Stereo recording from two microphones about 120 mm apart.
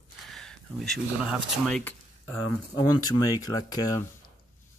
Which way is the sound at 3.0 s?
35° left (ahead or behind).